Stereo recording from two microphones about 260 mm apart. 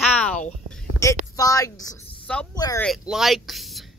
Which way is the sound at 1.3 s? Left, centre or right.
Centre.